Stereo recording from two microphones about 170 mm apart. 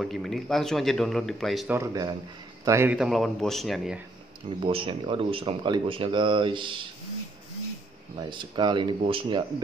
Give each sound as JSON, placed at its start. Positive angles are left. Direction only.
{"t": 0.0, "sound": "speech", "side_deg": 0}
{"t": 1.7, "sound": "a man's voice", "side_deg": -20}
{"t": 3.0, "sound": "speech", "side_deg": 0}
{"t": 4.6, "sound": "speech", "side_deg": -30}
{"t": 8.2, "sound": "speech", "side_deg": -25}